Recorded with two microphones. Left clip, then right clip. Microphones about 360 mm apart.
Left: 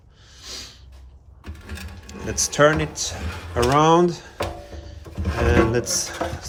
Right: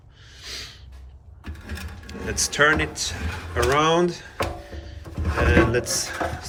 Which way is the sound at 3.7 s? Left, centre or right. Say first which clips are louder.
Left 5 dB; centre.